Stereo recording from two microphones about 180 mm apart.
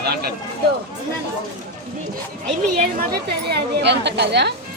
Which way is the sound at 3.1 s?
65° right (ahead or behind).